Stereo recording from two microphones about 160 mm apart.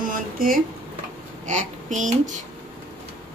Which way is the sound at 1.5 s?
50° right (ahead or behind).